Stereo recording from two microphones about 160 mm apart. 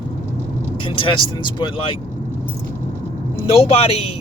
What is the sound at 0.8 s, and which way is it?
Speech, 35° left (ahead or behind).